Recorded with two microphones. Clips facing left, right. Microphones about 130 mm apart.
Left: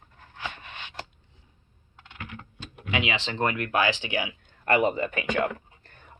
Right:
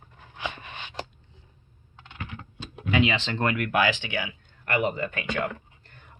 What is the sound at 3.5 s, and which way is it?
Speech, 30° left (ahead or behind).